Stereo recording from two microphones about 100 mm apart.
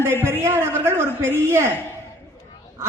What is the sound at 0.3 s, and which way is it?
A woman's voice, 25° right (ahead or behind).